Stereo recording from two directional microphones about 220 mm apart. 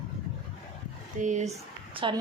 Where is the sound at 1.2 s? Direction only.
35° right (ahead or behind).